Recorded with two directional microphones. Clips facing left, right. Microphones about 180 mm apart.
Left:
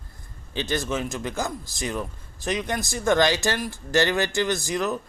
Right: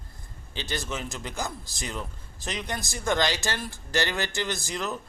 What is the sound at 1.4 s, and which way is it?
Speech, 20° left (ahead or behind).